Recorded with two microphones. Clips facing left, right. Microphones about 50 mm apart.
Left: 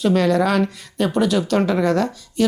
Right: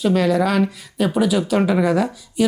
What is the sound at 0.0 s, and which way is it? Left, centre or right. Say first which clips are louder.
Speech: even; centre.